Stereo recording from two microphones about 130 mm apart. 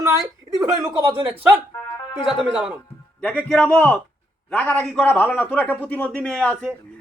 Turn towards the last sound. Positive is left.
turn(degrees=5)  # may be behind; listen again after turning